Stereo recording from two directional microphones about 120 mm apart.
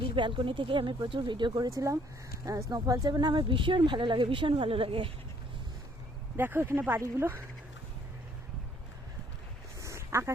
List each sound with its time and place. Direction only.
0.0 s speech: 45° right (ahead or behind)
6.3 s speech: 15° right (ahead or behind)
9.8 s a sound: 25° right (ahead or behind)